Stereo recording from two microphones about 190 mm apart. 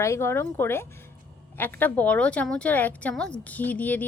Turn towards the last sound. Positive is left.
turn(degrees=10)  # may be behind; listen again after turning